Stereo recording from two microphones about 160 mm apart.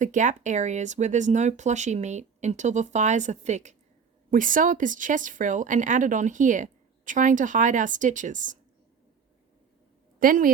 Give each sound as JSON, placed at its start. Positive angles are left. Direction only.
{"t": 0.0, "sound": "speech", "side_deg": -50}
{"t": 10.2, "sound": "a woman's voice", "side_deg": -60}